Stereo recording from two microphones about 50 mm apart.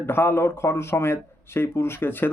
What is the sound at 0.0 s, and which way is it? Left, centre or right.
Speech, left.